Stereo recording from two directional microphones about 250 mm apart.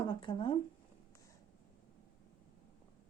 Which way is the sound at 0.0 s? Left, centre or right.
Centre.